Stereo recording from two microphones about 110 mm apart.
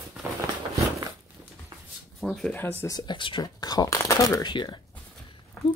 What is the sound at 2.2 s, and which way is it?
Speech, centre (ahead or behind).